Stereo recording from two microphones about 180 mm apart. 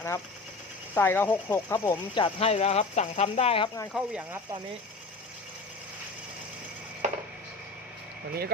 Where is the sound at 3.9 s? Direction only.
5° right (ahead or behind).